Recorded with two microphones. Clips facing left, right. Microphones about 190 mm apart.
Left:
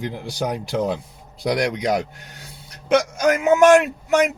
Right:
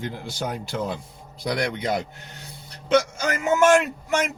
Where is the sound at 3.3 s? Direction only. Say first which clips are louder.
Left 5 dB; 65° left (ahead or behind).